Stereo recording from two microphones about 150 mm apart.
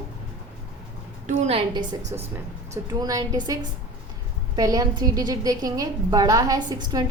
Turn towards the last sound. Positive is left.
turn(degrees=-25)  # may be behind; listen again after turning